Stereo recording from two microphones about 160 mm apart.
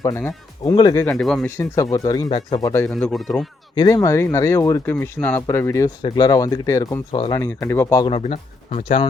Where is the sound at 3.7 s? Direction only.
25° left (ahead or behind).